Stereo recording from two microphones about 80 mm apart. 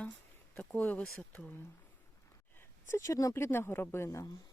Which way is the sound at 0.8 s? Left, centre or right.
Centre.